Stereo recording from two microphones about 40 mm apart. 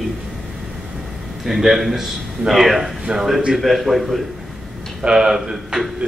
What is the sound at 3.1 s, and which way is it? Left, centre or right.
Speech, right.